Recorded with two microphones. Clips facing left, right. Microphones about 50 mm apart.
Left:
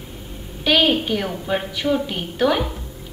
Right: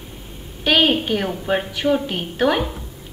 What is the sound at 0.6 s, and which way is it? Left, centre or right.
A woman's voice, centre.